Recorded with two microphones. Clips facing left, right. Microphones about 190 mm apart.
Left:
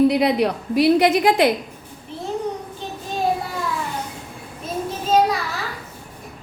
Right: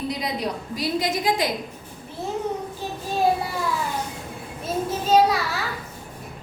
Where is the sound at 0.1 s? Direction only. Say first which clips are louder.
Left 9 dB; 65° left (ahead or behind).